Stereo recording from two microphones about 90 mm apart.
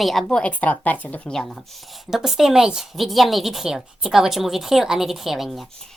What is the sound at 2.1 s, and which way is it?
A woman's voice, 5° right (ahead or behind).